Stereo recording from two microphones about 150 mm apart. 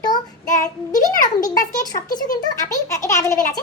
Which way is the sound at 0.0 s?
25° left (ahead or behind).